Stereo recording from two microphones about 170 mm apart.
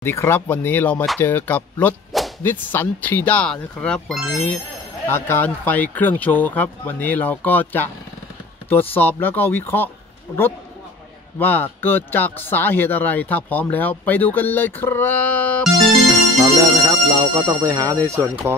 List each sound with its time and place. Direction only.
0.0 s speech: 15° left (ahead or behind)
1.2 s whip: 10° left (ahead or behind)
2.4 s speech: 10° left (ahead or behind)
11.3 s speech: 10° left (ahead or behind)
16.4 s speech: 20° right (ahead or behind)